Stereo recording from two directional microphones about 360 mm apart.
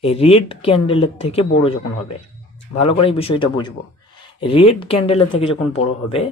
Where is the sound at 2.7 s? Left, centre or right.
Centre.